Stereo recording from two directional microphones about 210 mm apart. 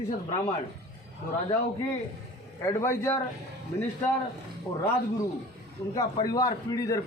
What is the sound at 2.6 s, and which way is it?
Speech, 10° left (ahead or behind).